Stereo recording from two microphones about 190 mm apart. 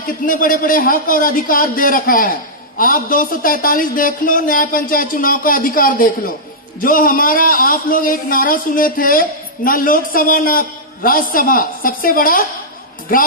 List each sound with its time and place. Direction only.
0.3 s a man's voice: 45° left (ahead or behind)